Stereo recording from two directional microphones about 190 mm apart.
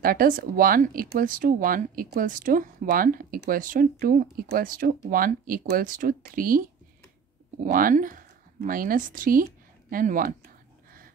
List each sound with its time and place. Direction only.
0.0 s speech: 50° right (ahead or behind)